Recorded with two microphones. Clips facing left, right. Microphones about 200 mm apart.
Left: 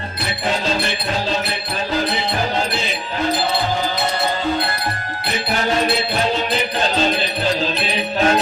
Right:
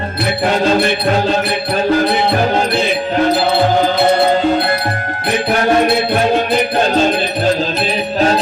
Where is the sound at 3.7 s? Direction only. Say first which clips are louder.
Right 10 dB; 60° right (ahead or behind).